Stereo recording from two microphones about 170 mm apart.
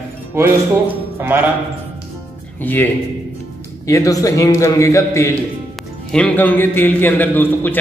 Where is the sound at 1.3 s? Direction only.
10° right (ahead or behind).